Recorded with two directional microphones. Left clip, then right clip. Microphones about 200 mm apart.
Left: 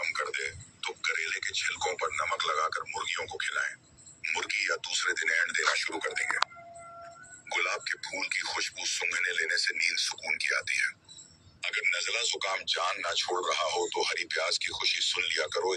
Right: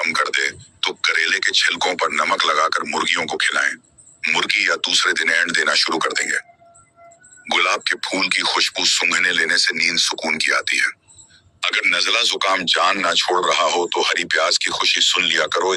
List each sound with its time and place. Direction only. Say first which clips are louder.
0.0 s speech: right 13 dB; 45° right (ahead or behind)
7.4 s speech: right 13 dB; 45° right (ahead or behind)